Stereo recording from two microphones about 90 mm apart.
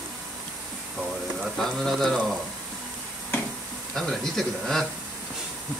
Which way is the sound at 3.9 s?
5° left (ahead or behind).